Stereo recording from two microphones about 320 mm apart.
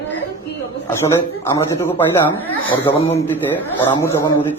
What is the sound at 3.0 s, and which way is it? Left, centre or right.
Speech, centre.